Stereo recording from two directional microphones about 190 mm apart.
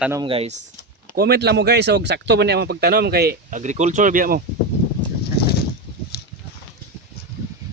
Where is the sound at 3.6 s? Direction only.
40° right (ahead or behind).